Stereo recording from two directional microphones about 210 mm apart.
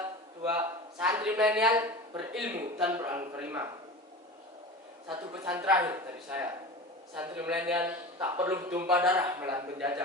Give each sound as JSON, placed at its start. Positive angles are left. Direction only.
{"t": 0.4, "sound": "a man's voice", "side_deg": -5}
{"t": 1.7, "sound": "speech", "side_deg": -20}
{"t": 2.3, "sound": "a man's voice", "side_deg": -5}
{"t": 5.5, "sound": "a man's voice", "side_deg": -10}